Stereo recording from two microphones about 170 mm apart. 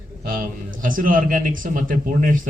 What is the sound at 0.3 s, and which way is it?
A man's voice, 55° right (ahead or behind).